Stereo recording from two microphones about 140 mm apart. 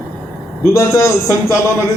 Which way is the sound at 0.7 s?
20° left (ahead or behind).